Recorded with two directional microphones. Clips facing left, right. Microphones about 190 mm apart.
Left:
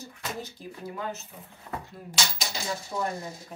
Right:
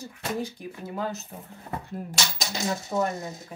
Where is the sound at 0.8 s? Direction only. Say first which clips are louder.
Right 3 dB; 35° right (ahead or behind).